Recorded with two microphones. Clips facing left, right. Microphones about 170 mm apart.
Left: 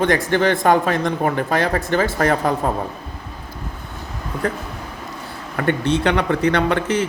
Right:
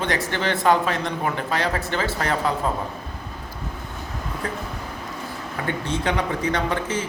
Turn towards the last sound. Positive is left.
turn(degrees=70)  # may be behind; listen again after turning